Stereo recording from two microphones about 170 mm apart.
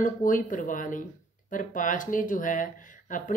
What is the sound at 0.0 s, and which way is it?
Speech, 50° left (ahead or behind).